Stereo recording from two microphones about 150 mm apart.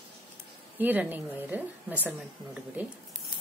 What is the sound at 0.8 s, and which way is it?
A woman's voice, 10° right (ahead or behind).